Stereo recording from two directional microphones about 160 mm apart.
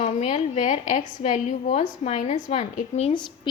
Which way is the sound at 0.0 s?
45° left (ahead or behind).